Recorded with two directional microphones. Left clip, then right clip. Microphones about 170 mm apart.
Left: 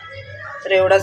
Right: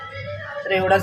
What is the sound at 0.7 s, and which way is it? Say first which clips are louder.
Speech: left 4 dB; 5° left (ahead or behind).